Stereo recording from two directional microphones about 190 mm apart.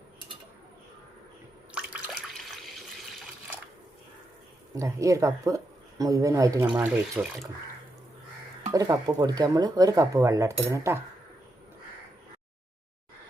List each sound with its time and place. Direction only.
4.7 s speech: 15° right (ahead or behind)
8.7 s speech: 20° right (ahead or behind)